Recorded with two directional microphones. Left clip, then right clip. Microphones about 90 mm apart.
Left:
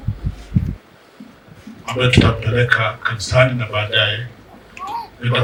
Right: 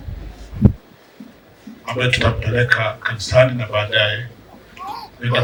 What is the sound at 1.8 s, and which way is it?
A man's voice, 35° right (ahead or behind).